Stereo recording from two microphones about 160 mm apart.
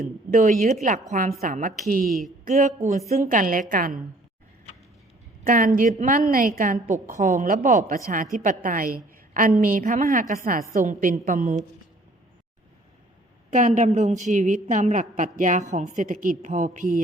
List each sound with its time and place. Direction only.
0.3 s a woman's voice: 50° right (ahead or behind)
2.0 s a sound: centre (ahead or behind)
2.6 s a woman's voice: 45° right (ahead or behind)
3.2 s a woman's voice: 55° right (ahead or behind)
5.5 s a woman's voice: 55° right (ahead or behind)
13.5 s a woman's voice: 50° right (ahead or behind)